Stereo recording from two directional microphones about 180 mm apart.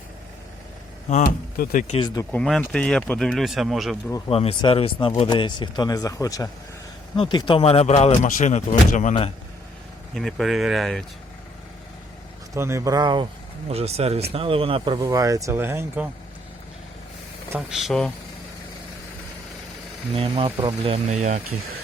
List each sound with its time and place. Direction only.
1.0 s speech: 45° left (ahead or behind)
2.0 s speech: 20° left (ahead or behind)
2.3 s speech: 5° left (ahead or behind)
4.3 s speech: 35° left (ahead or behind)
10.2 s speech: centre (ahead or behind)
12.5 s speech: 15° right (ahead or behind)
13.7 s speech: 35° right (ahead or behind)
15.0 s speech: 20° right (ahead or behind)
17.7 s speech: centre (ahead or behind)
20.1 s speech: 30° right (ahead or behind)